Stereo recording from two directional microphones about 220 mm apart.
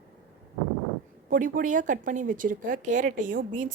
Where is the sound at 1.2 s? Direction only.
40° right (ahead or behind).